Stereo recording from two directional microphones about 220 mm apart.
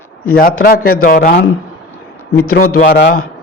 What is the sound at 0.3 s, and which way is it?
A man's voice, 40° left (ahead or behind).